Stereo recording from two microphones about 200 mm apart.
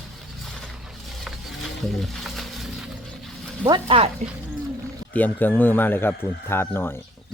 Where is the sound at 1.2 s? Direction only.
Centre (ahead or behind).